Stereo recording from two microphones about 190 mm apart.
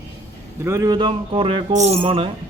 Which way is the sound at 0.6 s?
15° right (ahead or behind).